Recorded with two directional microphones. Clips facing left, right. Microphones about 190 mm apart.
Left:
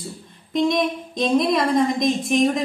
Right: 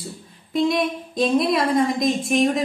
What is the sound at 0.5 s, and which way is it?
A woman's voice, 5° right (ahead or behind).